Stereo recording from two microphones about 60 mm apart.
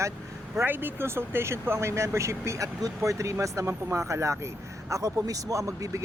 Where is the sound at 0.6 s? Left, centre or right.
Right.